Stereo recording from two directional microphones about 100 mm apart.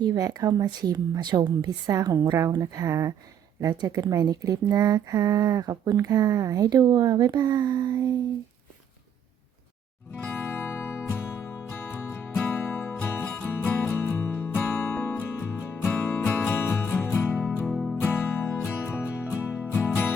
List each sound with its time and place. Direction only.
0.0 s speech: 40° right (ahead or behind)
10.2 s music: 20° left (ahead or behind)
17.7 s music: centre (ahead or behind)
18.0 s music: 20° left (ahead or behind)